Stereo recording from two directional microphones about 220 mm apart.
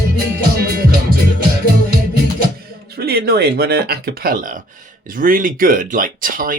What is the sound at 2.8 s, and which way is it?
Speech, 45° right (ahead or behind).